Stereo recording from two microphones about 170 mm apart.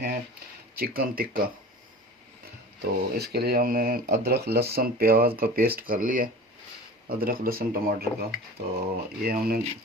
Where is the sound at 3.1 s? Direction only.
70° right (ahead or behind).